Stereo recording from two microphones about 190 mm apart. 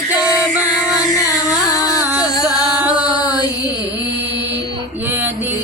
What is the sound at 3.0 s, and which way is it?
Mantra, 20° left (ahead or behind).